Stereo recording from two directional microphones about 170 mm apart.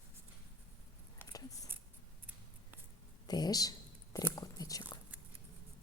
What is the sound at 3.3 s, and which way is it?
Speech, 20° left (ahead or behind).